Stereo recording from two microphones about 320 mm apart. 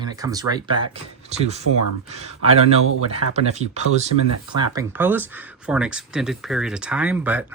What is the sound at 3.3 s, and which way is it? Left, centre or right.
Speech, right.